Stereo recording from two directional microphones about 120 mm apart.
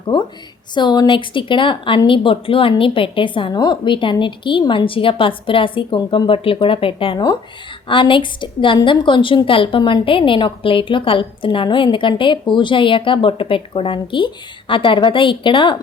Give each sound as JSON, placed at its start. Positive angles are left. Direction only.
{"t": 0.7, "sound": "a woman's voice", "side_deg": 40}